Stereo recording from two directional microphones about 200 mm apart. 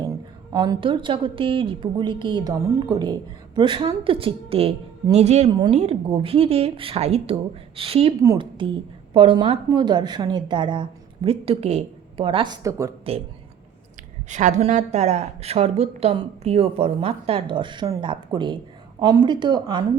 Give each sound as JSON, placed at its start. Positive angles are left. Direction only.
{"t": 0.5, "sound": "a woman's voice", "side_deg": -20}
{"t": 14.3, "sound": "a woman's voice", "side_deg": -35}